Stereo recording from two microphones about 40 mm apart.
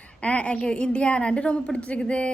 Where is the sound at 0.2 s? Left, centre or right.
Left.